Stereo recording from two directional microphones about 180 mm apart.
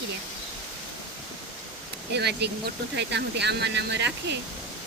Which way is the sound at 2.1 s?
65° right (ahead or behind).